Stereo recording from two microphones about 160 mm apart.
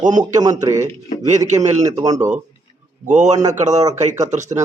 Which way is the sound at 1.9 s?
20° right (ahead or behind).